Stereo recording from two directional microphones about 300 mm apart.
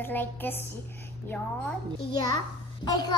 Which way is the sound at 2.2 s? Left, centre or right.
Centre.